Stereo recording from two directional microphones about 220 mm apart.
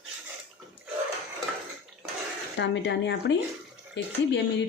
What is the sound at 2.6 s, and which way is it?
A woman's voice, 50° left (ahead or behind).